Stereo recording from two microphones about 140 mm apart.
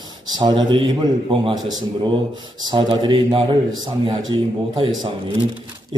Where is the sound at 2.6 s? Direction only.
35° right (ahead or behind).